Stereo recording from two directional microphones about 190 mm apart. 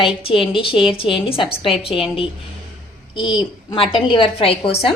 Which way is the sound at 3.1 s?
25° left (ahead or behind).